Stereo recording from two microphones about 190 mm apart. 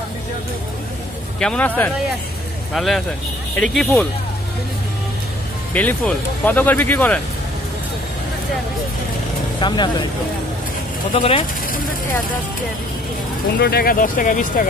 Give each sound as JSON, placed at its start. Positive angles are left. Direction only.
{"t": 1.4, "sound": "speech", "side_deg": 5}
{"t": 2.7, "sound": "speech", "side_deg": 0}
{"t": 5.7, "sound": "speech", "side_deg": 10}
{"t": 9.6, "sound": "speech", "side_deg": 25}
{"t": 11.1, "sound": "speech", "side_deg": 25}
{"t": 13.6, "sound": "speech", "side_deg": 55}